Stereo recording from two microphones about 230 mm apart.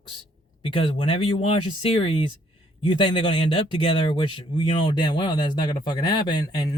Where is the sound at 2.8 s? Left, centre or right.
Left.